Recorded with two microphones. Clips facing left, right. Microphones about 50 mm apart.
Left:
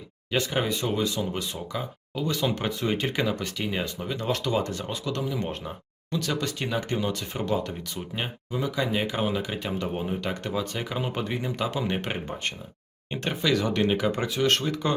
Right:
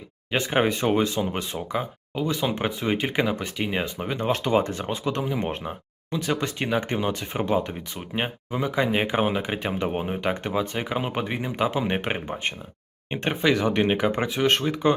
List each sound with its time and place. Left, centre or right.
0.3 s speech: right